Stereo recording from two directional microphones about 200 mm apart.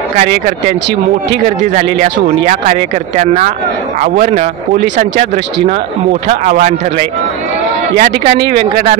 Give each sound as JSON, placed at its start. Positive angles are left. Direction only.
{"t": 1.4, "sound": "speech", "side_deg": -40}
{"t": 6.2, "sound": "speech", "side_deg": -40}
{"t": 8.0, "sound": "speech", "side_deg": -45}